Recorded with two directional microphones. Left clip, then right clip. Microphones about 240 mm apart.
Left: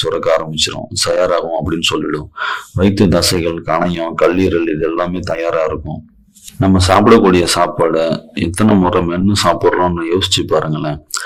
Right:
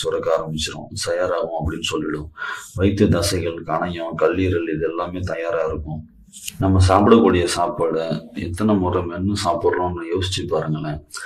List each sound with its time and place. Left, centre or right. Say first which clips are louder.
0.0 s speech: left 6 dB; left
6.6 s a man's voice: left 5 dB; left